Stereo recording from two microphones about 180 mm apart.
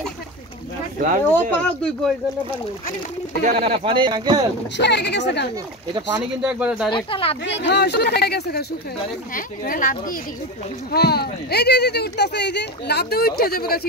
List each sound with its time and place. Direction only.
1.3 s speech: 5° left (ahead or behind)
3.4 s speech: 35° right (ahead or behind)
4.7 s speech: 70° left (ahead or behind)
6.1 s speech: 5° right (ahead or behind)
7.1 s speech: 30° left (ahead or behind)
7.6 s speech: 70° left (ahead or behind)
9.3 s speech: 50° left (ahead or behind)
10.9 s speech: 60° left (ahead or behind)